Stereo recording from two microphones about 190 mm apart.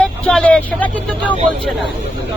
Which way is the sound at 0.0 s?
5° left (ahead or behind).